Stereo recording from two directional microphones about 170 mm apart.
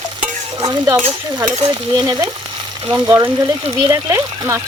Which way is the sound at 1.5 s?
25° right (ahead or behind).